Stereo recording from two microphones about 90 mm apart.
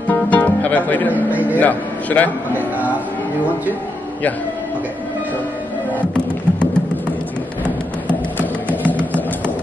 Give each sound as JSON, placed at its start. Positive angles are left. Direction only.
{"t": 0.1, "sound": "music", "side_deg": 15}
{"t": 1.6, "sound": "speech", "side_deg": 15}
{"t": 6.1, "sound": "music", "side_deg": 10}
{"t": 8.8, "sound": "music", "side_deg": 15}